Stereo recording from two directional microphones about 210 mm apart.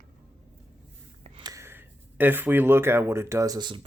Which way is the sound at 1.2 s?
20° right (ahead or behind).